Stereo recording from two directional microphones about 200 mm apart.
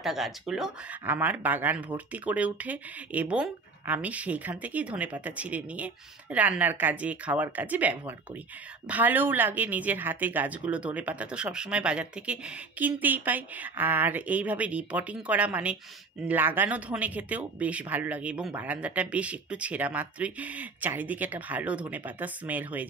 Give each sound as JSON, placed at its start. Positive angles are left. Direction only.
{"t": 0.0, "sound": "speech", "side_deg": 0}